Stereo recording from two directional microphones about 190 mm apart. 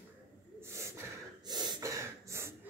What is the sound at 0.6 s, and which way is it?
Gasp, 15° right (ahead or behind).